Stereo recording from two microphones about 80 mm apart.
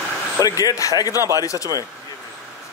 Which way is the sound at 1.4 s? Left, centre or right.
Left.